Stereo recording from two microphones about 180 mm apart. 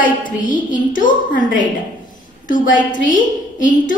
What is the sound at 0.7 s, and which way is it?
A woman's voice, 50° left (ahead or behind).